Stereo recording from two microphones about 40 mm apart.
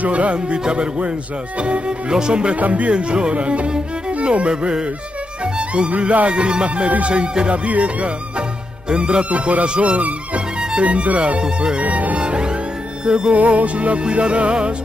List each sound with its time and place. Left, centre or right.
0.0 s music: right
1.6 s speech: right
2.6 s music: right
2.9 s speech: right
6.9 s music: right
11.8 s music: right
12.2 s speech: right
13.0 s music: right
13.3 s music: right